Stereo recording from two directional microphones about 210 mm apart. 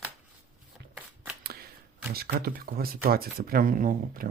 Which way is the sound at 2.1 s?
45° right (ahead or behind).